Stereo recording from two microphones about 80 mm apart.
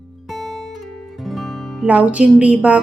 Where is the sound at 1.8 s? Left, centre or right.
Centre.